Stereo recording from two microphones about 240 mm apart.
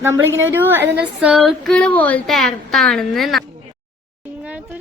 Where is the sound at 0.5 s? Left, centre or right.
Centre.